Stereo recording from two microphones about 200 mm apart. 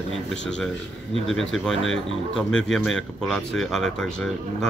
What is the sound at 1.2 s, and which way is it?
Speech, centre (ahead or behind).